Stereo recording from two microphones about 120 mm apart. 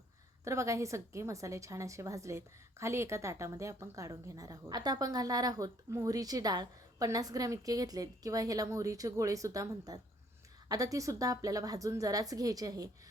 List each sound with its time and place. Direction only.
0.4 s a woman's voice: 25° right (ahead or behind)